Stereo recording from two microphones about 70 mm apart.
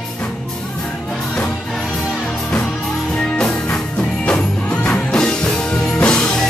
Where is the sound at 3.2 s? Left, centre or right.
Centre.